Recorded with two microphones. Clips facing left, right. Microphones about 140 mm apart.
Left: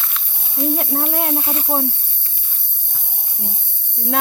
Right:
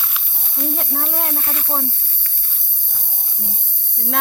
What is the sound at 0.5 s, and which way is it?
Speech, 15° left (ahead or behind).